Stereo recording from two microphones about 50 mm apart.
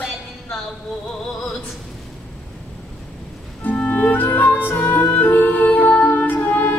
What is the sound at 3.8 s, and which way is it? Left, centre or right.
Music, left.